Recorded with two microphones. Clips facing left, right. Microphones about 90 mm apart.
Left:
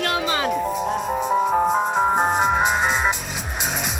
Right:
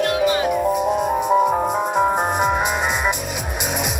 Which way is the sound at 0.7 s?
15° right (ahead or behind).